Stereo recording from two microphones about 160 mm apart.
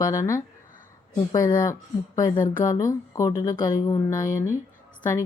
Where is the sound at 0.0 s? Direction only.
20° left (ahead or behind).